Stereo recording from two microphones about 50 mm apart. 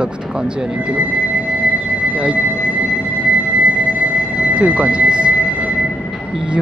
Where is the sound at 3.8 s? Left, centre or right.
Right.